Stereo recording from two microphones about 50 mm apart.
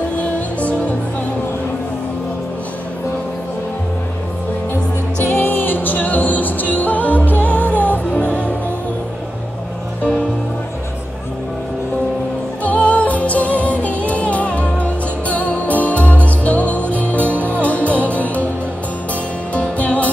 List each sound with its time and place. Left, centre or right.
0.2 s music: left
5.2 s music: left
12.6 s music: left
19.5 s music: left